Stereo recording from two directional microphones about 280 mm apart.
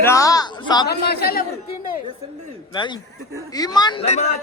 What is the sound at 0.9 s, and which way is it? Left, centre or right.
Speech, left.